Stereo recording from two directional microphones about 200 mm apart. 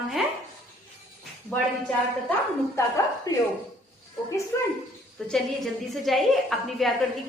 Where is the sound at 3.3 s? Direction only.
20° left (ahead or behind).